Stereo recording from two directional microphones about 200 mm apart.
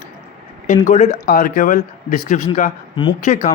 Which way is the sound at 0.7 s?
35° left (ahead or behind).